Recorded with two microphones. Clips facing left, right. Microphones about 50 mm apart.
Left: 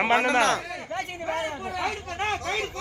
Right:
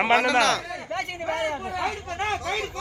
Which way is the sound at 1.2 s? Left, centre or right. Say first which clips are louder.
Right 3 dB; right.